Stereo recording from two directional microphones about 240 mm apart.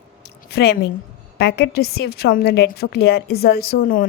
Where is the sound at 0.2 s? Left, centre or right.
Left.